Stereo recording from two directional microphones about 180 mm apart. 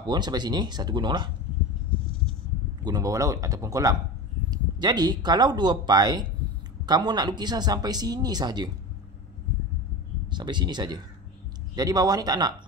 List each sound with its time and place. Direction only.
0.0 s speech: 25° right (ahead or behind)
2.8 s speech: 20° right (ahead or behind)
10.2 s speech: 25° right (ahead or behind)